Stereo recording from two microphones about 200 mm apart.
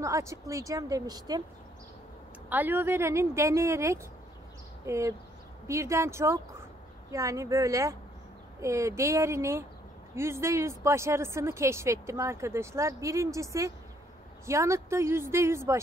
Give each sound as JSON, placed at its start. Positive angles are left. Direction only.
{"t": 0.0, "sound": "a woman's voice", "side_deg": -15}
{"t": 2.5, "sound": "a woman's voice", "side_deg": -10}